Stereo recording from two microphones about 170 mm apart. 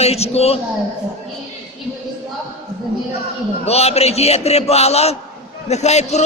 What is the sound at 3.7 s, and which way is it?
A man's voice, 40° left (ahead or behind).